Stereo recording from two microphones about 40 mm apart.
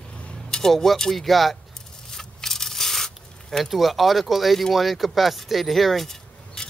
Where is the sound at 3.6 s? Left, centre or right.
Centre.